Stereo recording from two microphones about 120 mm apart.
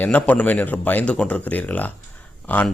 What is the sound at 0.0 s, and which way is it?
A man's voice, 10° left (ahead or behind).